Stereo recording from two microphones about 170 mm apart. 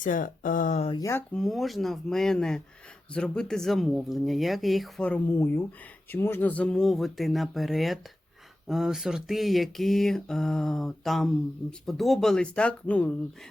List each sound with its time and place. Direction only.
0.0 s speech: 50° left (ahead or behind)
0.9 s speech: 25° left (ahead or behind)
1.1 s mantra: 5° left (ahead or behind)